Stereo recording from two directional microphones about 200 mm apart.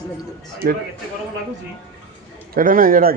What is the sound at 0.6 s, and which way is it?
Speech, 50° right (ahead or behind).